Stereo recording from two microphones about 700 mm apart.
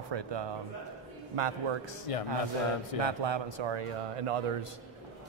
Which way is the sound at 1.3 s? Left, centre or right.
Right.